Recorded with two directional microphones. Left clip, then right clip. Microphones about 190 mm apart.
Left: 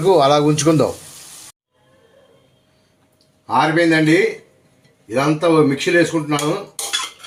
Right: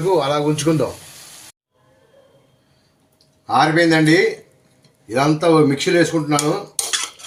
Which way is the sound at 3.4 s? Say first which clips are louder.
Even; 5° right (ahead or behind).